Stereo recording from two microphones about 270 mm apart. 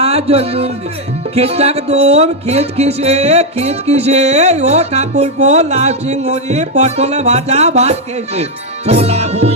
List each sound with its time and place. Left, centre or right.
0.0 s speech: right
1.4 s music: right